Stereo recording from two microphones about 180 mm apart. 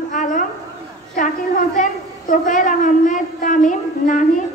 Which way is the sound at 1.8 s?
45° left (ahead or behind).